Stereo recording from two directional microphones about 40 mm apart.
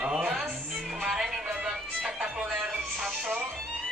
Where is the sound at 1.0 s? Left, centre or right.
Centre.